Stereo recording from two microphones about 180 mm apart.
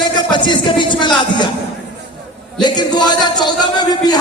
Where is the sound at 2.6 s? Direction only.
25° left (ahead or behind).